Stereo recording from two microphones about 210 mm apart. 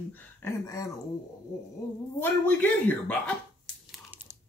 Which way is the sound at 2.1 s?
10° left (ahead or behind).